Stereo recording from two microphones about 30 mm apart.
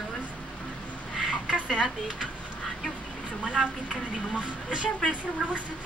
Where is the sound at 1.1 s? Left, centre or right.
Centre.